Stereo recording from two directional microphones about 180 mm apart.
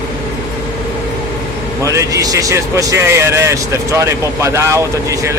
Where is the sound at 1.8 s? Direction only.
15° right (ahead or behind).